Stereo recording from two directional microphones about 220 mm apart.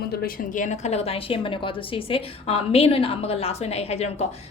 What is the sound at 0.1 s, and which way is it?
A woman's voice, 45° left (ahead or behind).